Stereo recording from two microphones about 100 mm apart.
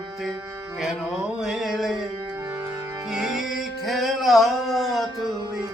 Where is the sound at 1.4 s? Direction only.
5° right (ahead or behind).